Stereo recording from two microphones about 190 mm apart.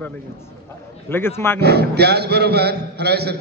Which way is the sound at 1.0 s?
10° left (ahead or behind).